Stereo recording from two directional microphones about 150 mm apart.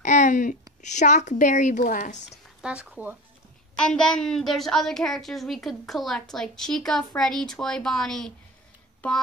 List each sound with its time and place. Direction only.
0.0 s a woman's voice: 55° left (ahead or behind)
2.6 s speech: 5° right (ahead or behind)
3.7 s a woman's voice: 5° left (ahead or behind)